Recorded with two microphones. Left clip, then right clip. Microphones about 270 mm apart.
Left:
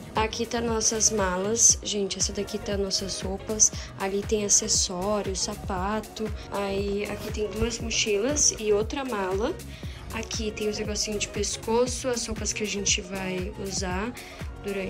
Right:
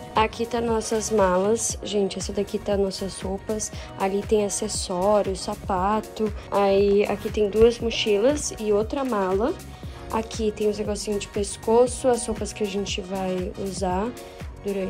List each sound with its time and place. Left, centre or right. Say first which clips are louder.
0.1 s a woman's voice: right 4 dB; centre
10.1 s a woman's voice: right 6 dB; centre